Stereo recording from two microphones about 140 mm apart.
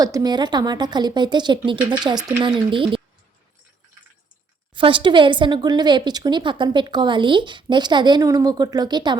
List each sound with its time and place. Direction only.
0.0 s speech: 25° right (ahead or behind)
4.7 s speech: 35° right (ahead or behind)